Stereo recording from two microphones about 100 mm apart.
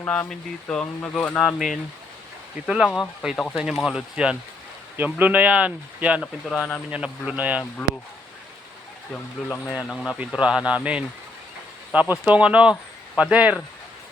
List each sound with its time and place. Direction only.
0.0 s speech: 20° left (ahead or behind)
1.4 s speech: 5° right (ahead or behind)
6.4 s speech: 5° left (ahead or behind)
6.9 s speech: 10° right (ahead or behind)
9.6 s speech: 5° right (ahead or behind)